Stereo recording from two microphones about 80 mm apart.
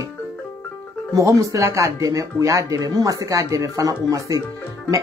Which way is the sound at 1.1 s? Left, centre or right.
Right.